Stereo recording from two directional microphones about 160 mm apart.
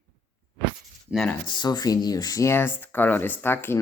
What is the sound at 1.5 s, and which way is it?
Speech, 25° left (ahead or behind).